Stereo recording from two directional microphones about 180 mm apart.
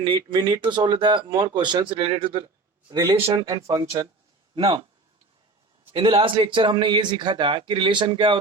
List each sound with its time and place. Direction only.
0.0 s speech: 25° right (ahead or behind)
2.9 s speech: 15° right (ahead or behind)
3.2 s speech: 35° right (ahead or behind)
3.4 s speech: 20° right (ahead or behind)
5.9 s speech: 30° right (ahead or behind)